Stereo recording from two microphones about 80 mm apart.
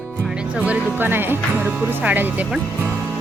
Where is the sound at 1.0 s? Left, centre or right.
Right.